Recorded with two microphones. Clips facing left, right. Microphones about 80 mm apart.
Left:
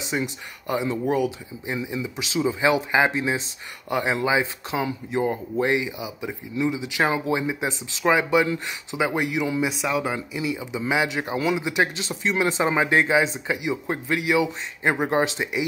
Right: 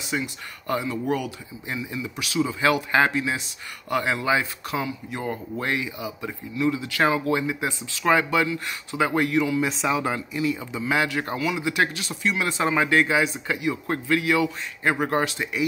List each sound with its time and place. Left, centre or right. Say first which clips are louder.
0.0 s speech: left 2 dB; left
11.3 s speech: left 2 dB; left